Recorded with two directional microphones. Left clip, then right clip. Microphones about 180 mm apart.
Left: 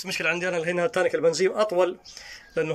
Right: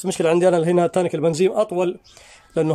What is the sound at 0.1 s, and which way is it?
Speech, 40° right (ahead or behind).